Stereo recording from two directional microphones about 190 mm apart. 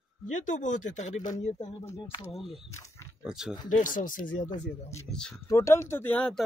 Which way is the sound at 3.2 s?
5° right (ahead or behind).